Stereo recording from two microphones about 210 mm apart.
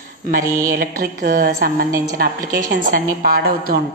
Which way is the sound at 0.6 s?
45° right (ahead or behind).